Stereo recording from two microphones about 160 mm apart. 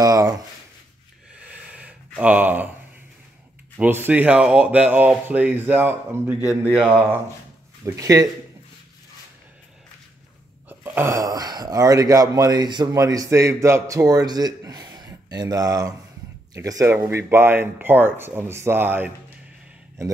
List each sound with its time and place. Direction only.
0.0 s a sound: 25° right (ahead or behind)
1.5 s gasp: 10° right (ahead or behind)
3.7 s speech: 15° right (ahead or behind)
7.8 s speech: 20° right (ahead or behind)
10.7 s speech: 15° right (ahead or behind)